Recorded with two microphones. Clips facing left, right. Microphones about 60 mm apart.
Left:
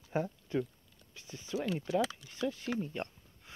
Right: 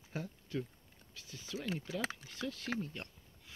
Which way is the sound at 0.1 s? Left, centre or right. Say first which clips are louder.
Left 7 dB; left.